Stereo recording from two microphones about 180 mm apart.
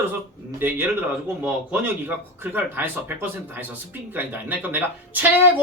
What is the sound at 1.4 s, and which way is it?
Speech, 10° right (ahead or behind).